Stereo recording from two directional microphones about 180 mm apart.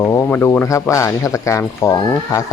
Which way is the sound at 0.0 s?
15° left (ahead or behind).